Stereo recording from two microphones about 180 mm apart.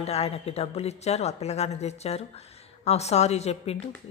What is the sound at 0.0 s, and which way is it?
A woman's voice, 35° left (ahead or behind).